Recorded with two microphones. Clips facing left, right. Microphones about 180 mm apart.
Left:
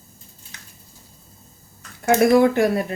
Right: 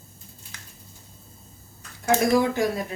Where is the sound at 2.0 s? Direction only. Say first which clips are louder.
Left 6 dB; 65° left (ahead or behind).